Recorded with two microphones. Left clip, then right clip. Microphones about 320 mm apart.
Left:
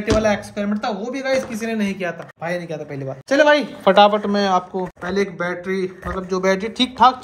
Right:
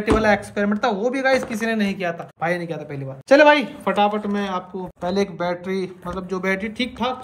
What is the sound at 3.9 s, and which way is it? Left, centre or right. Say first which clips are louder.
Speech: left 8 dB; left.